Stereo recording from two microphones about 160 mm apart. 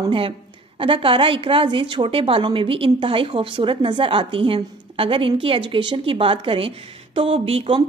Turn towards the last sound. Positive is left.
turn(degrees=-35)  # may be behind; listen again after turning